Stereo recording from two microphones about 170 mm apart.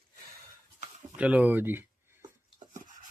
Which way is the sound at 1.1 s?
10° right (ahead or behind).